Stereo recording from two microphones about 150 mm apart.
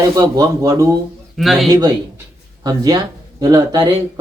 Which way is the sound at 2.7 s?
25° right (ahead or behind).